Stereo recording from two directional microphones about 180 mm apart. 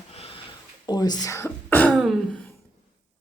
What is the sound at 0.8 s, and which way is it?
Speech, 20° left (ahead or behind).